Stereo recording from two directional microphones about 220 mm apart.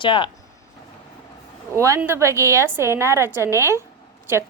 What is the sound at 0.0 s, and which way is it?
Speech, 20° left (ahead or behind).